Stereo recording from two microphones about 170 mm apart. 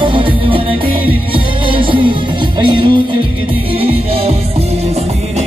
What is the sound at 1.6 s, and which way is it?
Music, 30° right (ahead or behind).